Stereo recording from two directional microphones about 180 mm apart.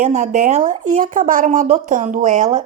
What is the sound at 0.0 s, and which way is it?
Speech, 45° right (ahead or behind).